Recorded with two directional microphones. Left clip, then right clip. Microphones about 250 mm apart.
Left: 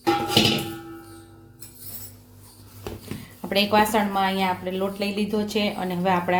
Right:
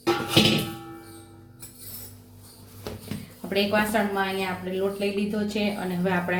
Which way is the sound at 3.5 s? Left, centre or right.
Left.